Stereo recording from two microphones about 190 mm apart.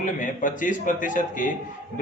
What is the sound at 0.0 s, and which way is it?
A man's voice, 45° left (ahead or behind).